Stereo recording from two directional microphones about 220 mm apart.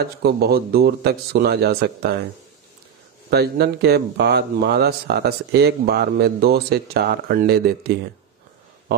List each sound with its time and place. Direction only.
0.0 s speech: 45° right (ahead or behind)
3.3 s speech: 45° right (ahead or behind)